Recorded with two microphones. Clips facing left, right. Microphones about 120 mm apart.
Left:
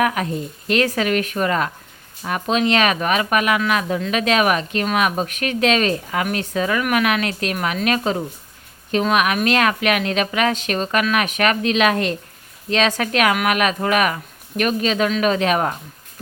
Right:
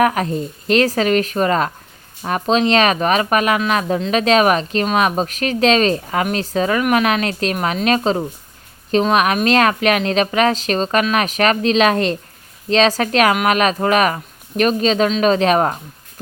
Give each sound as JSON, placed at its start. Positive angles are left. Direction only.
{"t": 0.0, "sound": "a woman's voice", "side_deg": -40}